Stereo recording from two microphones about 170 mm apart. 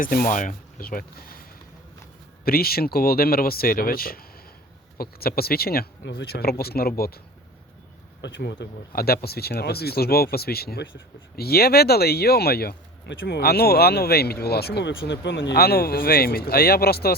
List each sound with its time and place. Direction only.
0.0 s speech: 55° left (ahead or behind)
2.4 s speech: 60° left (ahead or behind)
8.2 s speech: 90° left; by 17.2 s 65° left (ahead or behind)